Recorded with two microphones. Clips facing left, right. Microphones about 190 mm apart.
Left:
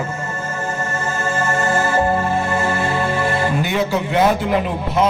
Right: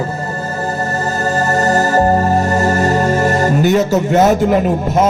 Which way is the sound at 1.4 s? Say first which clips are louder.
Right 5 dB; 40° right (ahead or behind).